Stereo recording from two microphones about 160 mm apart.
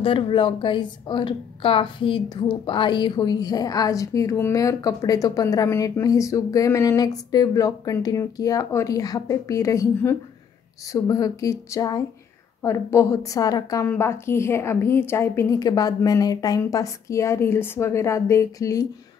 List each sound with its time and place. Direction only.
0.0 s a woman's voice: 30° left (ahead or behind)